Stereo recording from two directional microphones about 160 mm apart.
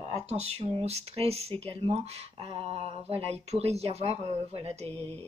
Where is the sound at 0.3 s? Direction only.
40° right (ahead or behind).